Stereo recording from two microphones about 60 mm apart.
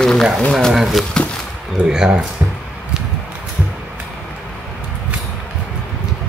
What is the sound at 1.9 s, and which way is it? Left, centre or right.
Speech, centre.